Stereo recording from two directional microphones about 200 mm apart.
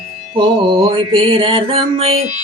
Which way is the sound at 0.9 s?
25° right (ahead or behind).